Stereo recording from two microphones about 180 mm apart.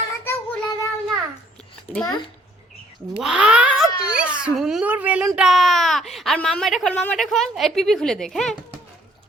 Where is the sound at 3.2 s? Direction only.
5° right (ahead or behind).